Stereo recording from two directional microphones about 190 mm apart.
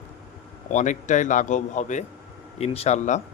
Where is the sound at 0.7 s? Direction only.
40° left (ahead or behind).